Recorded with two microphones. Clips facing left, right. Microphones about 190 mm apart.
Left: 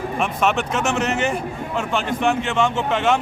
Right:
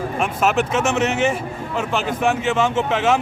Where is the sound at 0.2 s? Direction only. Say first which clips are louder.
Right 2 dB; centre (ahead or behind).